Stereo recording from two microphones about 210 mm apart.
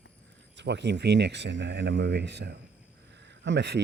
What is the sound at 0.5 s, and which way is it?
Speech, 55° right (ahead or behind).